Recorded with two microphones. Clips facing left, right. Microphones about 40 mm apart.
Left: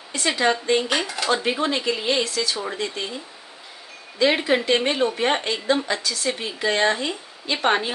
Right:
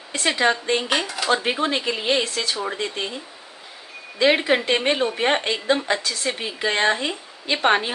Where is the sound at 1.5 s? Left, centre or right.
Right.